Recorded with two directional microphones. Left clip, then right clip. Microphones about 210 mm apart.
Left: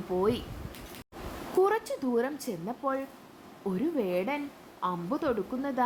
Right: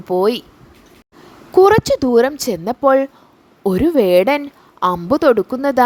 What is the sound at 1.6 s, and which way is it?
A woman's voice, 45° right (ahead or behind).